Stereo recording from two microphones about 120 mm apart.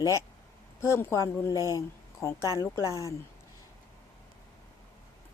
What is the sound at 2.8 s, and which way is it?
Speech, 30° right (ahead or behind).